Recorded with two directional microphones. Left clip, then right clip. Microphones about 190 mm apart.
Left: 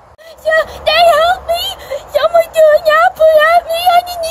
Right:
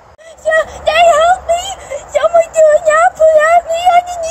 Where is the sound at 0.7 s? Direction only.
10° left (ahead or behind).